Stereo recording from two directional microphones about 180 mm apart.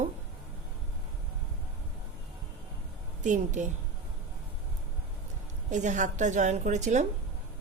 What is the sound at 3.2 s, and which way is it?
Speech, 45° right (ahead or behind).